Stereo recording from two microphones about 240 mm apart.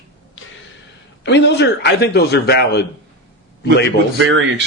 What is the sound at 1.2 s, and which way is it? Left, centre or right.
A man's voice, left.